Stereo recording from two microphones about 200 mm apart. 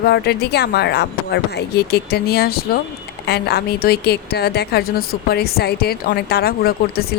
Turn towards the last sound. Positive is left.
turn(degrees=50)  # may be behind; listen again after turning